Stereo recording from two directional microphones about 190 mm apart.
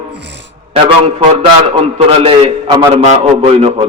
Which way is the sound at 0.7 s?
30° right (ahead or behind).